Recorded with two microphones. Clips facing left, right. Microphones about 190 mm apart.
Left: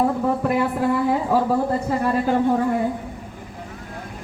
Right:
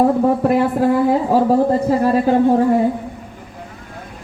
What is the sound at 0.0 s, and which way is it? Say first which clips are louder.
Speech: right 6 dB; 40° right (ahead or behind).